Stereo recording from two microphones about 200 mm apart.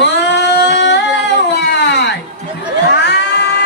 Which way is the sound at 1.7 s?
60° left (ahead or behind).